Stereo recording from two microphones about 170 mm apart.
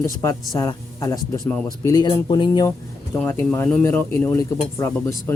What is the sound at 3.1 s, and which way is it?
Speech, 10° left (ahead or behind).